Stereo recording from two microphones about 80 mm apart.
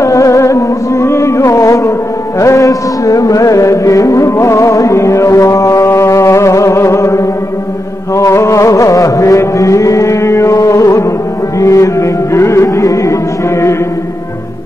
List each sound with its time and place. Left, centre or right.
0.0 s music: left